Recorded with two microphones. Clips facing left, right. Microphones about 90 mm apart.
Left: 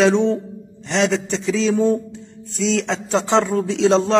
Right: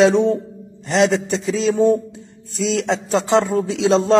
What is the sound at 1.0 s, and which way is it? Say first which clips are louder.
Speech: right 2 dB; 40° right (ahead or behind).